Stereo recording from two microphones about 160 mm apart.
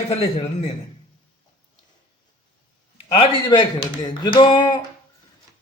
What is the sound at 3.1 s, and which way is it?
Speech, 30° left (ahead or behind).